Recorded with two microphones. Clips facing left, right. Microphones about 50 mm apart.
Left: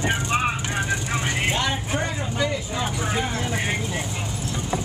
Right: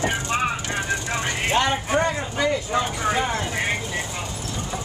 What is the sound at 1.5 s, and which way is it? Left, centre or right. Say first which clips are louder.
Speech: right 4 dB; right.